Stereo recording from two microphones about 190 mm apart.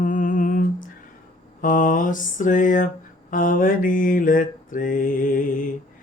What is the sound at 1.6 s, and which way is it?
Mantra, 45° left (ahead or behind).